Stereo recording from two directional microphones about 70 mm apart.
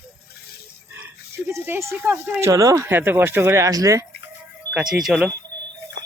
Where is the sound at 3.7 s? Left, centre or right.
Right.